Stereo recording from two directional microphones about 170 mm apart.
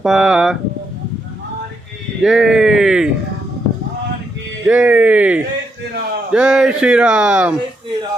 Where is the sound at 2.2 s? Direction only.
Centre (ahead or behind).